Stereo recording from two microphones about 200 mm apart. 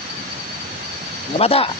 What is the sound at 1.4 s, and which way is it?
Speech, 30° left (ahead or behind).